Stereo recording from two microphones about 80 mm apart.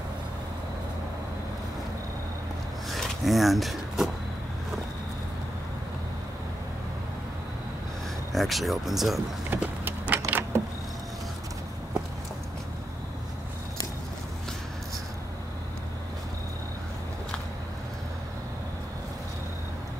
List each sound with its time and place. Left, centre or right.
2.9 s a sound: centre
8.3 s speech: centre
9.5 s power windows: right